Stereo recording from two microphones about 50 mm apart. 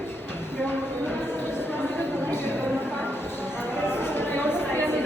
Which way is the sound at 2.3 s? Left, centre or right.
Left.